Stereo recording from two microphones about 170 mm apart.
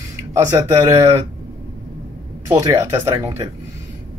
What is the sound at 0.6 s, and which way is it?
Speech, 40° right (ahead or behind).